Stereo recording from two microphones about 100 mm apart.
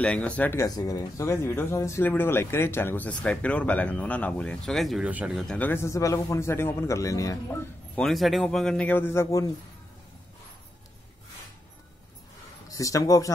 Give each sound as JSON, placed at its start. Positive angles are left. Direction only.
{"t": 0.0, "sound": "a man's voice", "side_deg": 15}
{"t": 0.6, "sound": "speech", "side_deg": 40}
{"t": 5.0, "sound": "speech", "side_deg": -10}
{"t": 5.5, "sound": "speech", "side_deg": 20}
{"t": 7.9, "sound": "a man's voice", "side_deg": 5}
{"t": 12.6, "sound": "speech", "side_deg": 35}